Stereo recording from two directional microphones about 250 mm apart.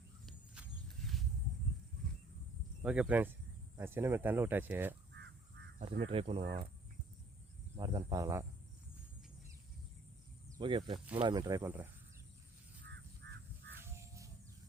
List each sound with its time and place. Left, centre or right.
1.0 s a sound: centre
2.8 s speech: centre
5.8 s speech: right
6.4 s speech: right
7.8 s speech: centre
10.6 s speech: right
12.8 s crow: right
13.9 s a sound: centre